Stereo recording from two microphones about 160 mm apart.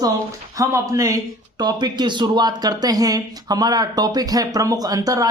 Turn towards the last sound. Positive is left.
turn(degrees=-20)  # may be behind; listen again after turning